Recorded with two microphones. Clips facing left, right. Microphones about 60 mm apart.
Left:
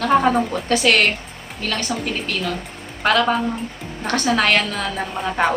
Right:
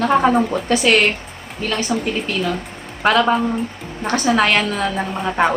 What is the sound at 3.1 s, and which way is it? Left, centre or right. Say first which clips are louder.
A woman's voice: right 2 dB; right.